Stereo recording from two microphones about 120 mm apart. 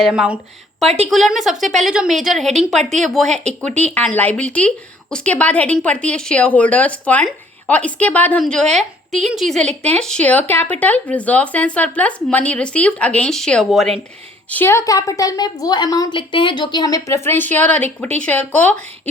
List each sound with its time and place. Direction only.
0.1 s a woman's voice: 10° right (ahead or behind)
2.7 s speech: 80° right
3.1 s a woman's voice: 5° left (ahead or behind)
14.5 s a woman's voice: 20° left (ahead or behind)